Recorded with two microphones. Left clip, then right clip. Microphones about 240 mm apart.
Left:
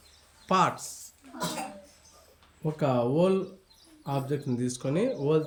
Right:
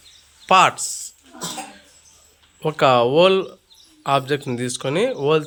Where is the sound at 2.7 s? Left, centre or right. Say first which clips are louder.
Right 13 dB; centre.